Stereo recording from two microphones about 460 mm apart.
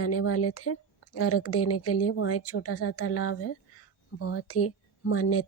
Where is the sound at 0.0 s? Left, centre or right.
Left.